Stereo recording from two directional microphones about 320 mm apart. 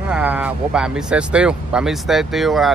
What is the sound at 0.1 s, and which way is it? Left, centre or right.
Speech, centre.